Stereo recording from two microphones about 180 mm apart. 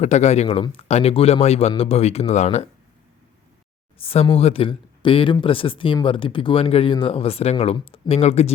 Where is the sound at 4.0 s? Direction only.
30° left (ahead or behind).